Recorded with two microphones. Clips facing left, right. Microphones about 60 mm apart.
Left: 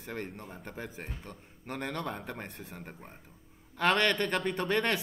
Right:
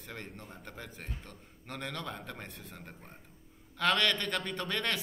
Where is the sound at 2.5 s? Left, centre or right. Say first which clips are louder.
Left 3 dB; centre.